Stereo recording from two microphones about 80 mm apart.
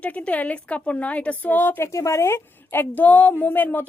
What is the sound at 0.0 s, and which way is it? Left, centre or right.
A woman's voice, centre.